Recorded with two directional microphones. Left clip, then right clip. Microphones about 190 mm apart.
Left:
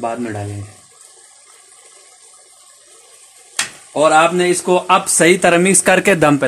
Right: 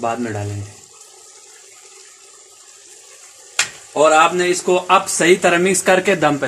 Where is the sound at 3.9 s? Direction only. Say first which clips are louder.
Left 1 dB; 40° left (ahead or behind).